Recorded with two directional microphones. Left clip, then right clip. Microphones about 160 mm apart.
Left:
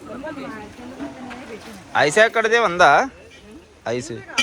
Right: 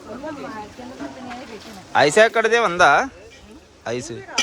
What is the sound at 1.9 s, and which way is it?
Speech, 30° right (ahead or behind).